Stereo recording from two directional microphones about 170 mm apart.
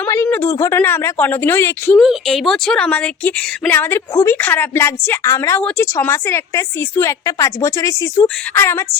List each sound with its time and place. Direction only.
0.0 s a woman's voice: 15° left (ahead or behind)
2.0 s a woman's voice: centre (ahead or behind)